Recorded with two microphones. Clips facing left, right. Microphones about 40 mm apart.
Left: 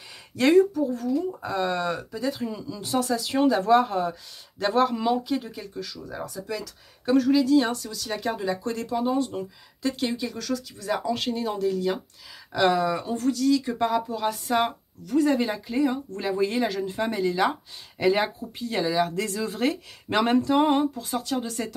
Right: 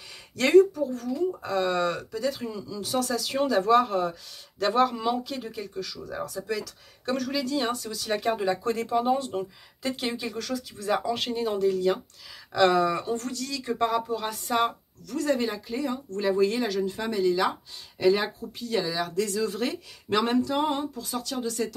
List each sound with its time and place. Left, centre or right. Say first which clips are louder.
0.4 s speech: even; centre
15.0 s speech: left 4 dB; centre; by 21.7 s left